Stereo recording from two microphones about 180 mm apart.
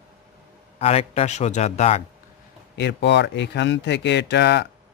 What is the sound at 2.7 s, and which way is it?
Speech, 75° left (ahead or behind).